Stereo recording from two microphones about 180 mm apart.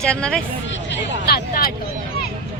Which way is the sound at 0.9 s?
55° left (ahead or behind).